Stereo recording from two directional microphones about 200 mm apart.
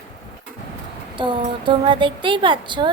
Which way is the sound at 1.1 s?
25° right (ahead or behind).